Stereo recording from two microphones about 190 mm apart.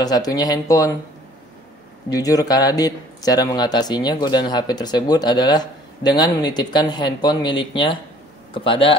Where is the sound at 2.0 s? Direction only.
20° left (ahead or behind).